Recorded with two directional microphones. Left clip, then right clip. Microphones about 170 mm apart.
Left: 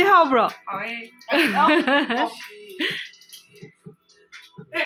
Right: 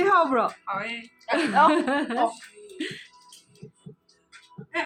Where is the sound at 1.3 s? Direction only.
20° left (ahead or behind).